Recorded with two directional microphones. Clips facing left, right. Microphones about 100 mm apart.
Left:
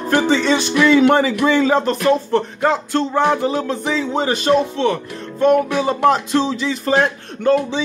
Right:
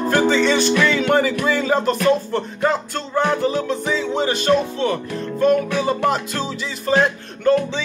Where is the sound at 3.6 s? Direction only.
35° left (ahead or behind).